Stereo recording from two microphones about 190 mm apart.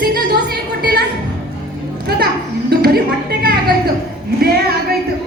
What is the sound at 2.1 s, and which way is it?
Music, 55° right (ahead or behind).